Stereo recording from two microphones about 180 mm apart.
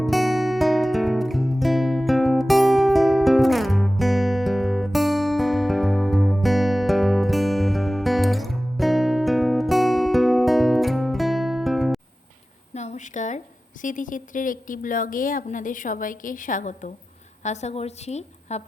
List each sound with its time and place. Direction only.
0.0 s music: centre (ahead or behind)
12.7 s a sound: 40° left (ahead or behind)
13.8 s a woman's voice: 45° left (ahead or behind)